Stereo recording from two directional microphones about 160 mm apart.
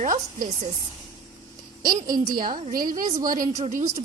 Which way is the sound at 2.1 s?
60° right (ahead or behind).